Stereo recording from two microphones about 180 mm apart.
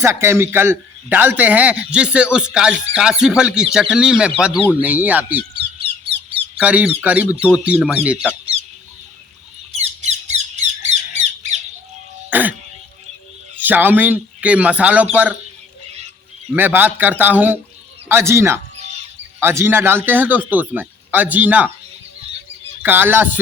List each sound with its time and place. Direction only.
0.0 s a man's voice: 15° right (ahead or behind)
5.8 s a sound: 30° right (ahead or behind)
6.6 s a man's voice: 5° right (ahead or behind)
9.7 s squawk: 35° right (ahead or behind)
12.3 s music: 10° right (ahead or behind)
13.6 s a man's voice: 10° right (ahead or behind)
16.6 s a man's voice: 10° right (ahead or behind)
22.8 s a man's voice: 10° right (ahead or behind)